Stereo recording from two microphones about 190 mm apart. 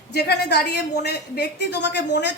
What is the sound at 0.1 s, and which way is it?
Speech, 60° left (ahead or behind).